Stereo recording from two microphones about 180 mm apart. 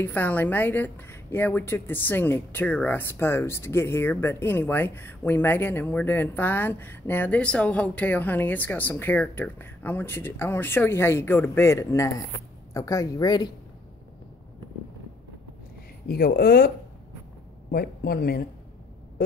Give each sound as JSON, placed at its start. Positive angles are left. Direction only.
{"t": 0.0, "sound": "a woman's voice", "side_deg": 10}
{"t": 16.1, "sound": "speech", "side_deg": 55}